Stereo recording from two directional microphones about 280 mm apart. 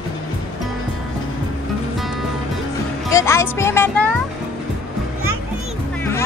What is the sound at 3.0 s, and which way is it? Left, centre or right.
Speech, centre.